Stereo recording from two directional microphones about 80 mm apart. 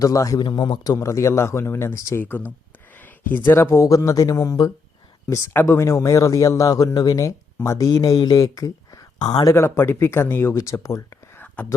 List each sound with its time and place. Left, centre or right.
0.0 s speech: left
0.3 s speech: left
0.9 s a man's voice: left
3.2 s a man's voice: left
5.5 s a man's voice: left
7.9 s speech: left
9.2 s speech: left
9.5 s a man's voice: left
11.3 s a sound: left